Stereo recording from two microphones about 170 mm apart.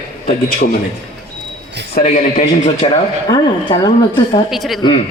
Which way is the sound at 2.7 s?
35° left (ahead or behind).